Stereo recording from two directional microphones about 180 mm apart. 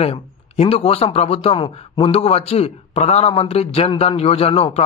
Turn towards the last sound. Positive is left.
turn(degrees=35)  # may be behind; listen again after turning